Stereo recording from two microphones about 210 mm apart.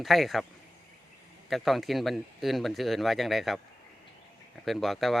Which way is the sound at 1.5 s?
Centre (ahead or behind).